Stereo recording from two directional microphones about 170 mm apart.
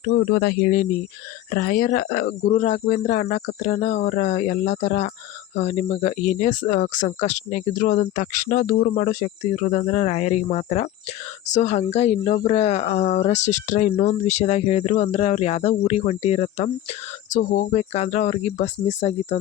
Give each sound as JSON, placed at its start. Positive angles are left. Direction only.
{"t": 0.0, "sound": "speech", "side_deg": 85}